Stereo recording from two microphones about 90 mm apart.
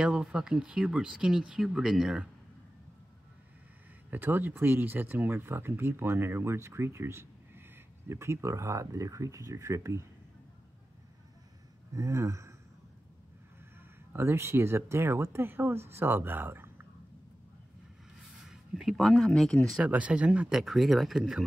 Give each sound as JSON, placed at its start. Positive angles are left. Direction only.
{"t": 0.0, "sound": "speech", "side_deg": -10}
{"t": 4.1, "sound": "speech", "side_deg": -20}
{"t": 11.9, "sound": "speech", "side_deg": -35}
{"t": 14.1, "sound": "speech", "side_deg": -30}
{"t": 18.4, "sound": "speech", "side_deg": -5}
{"t": 19.8, "sound": "speech", "side_deg": -15}